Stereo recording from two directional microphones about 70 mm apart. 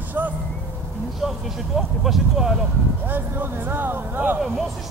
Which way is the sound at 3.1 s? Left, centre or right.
Right.